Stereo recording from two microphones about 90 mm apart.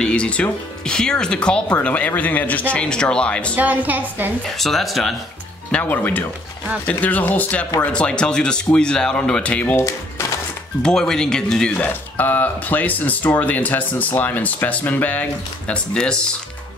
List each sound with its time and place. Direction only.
0.0 s speech: 10° left (ahead or behind)
3.5 s a woman's voice: 20° right (ahead or behind)
4.6 s speech: centre (ahead or behind)
5.7 s speech: 15° left (ahead or behind)
9.8 s speech: 30° left (ahead or behind)
10.8 s speech: 5° left (ahead or behind)
11.7 s speech: 20° left (ahead or behind)